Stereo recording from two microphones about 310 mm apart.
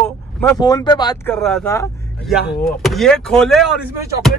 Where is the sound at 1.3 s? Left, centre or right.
Centre.